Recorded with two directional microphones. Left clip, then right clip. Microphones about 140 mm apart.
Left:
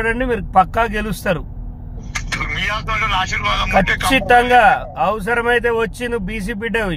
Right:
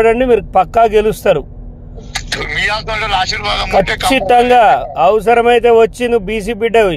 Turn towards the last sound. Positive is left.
turn(degrees=-40)  # may be behind; listen again after turning